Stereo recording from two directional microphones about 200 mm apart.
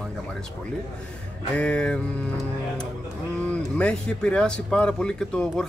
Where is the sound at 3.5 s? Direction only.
5° left (ahead or behind).